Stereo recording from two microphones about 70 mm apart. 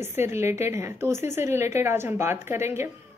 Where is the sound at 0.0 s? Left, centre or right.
Right.